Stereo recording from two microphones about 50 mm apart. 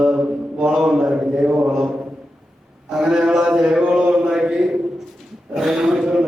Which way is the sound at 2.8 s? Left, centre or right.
Centre.